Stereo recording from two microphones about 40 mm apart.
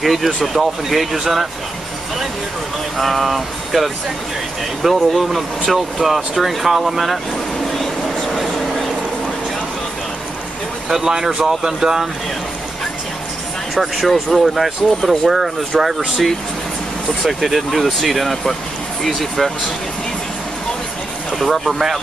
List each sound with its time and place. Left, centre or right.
0.0 s speech: centre
3.0 s speech: centre
7.8 s vehicle: centre
10.9 s speech: centre
11.2 s speech: centre
13.7 s speech: centre
17.2 s speech: centre
21.3 s speech: centre